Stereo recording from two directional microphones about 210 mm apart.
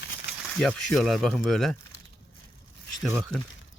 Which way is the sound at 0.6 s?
Centre (ahead or behind).